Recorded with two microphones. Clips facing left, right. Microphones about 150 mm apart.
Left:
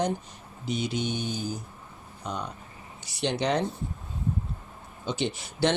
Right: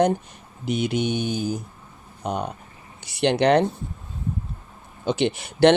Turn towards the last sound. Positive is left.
turn(degrees=-65)  # may be behind; listen again after turning